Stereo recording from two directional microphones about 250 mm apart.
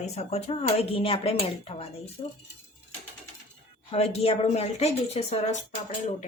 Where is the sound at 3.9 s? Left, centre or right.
Left.